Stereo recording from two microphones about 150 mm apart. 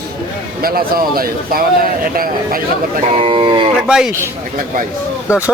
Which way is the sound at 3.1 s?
40° right (ahead or behind).